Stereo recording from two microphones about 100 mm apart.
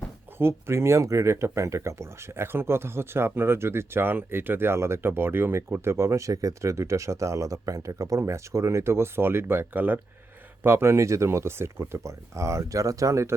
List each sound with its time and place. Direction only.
0.3 s speech: 25° right (ahead or behind)